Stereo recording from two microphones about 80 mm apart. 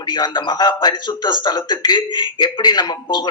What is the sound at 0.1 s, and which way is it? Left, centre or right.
Speech, left.